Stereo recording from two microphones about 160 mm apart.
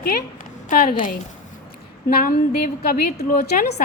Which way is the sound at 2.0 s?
65° left (ahead or behind).